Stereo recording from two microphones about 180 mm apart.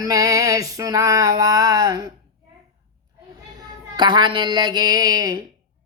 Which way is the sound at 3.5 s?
25° right (ahead or behind).